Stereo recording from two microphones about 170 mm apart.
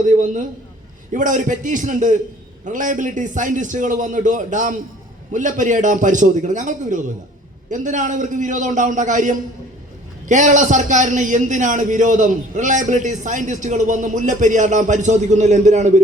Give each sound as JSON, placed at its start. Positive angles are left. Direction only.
{"t": 0.0, "sound": "a man's voice", "side_deg": -50}